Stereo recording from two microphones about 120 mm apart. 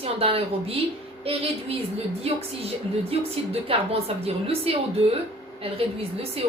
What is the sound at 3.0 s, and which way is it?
A woman's voice, 55° right (ahead or behind).